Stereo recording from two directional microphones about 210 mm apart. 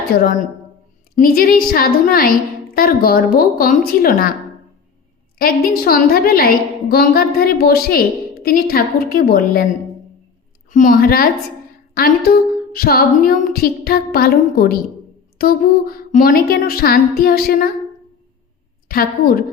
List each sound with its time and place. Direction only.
0.1 s a woman's voice: 40° left (ahead or behind)
5.4 s a woman's voice: 45° left (ahead or behind)
10.7 s a woman's voice: 40° left (ahead or behind)
18.9 s a woman's voice: 45° left (ahead or behind)